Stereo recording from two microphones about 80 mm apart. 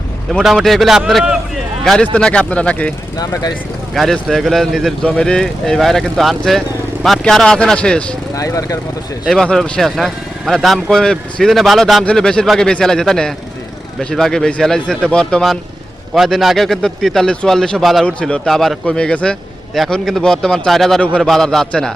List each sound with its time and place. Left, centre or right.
0.4 s a man's voice: centre
3.9 s speech: centre
8.4 s speech: left
9.3 s speech: centre
16.1 s speech: centre
18.0 s speech: centre
18.9 s speech: centre